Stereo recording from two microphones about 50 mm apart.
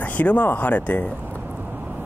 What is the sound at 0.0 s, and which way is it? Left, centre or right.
Speech, left.